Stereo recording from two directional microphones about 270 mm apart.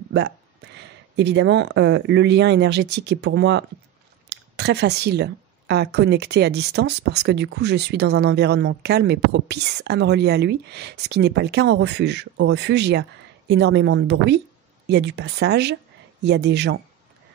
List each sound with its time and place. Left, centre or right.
1.1 s a woman's voice: right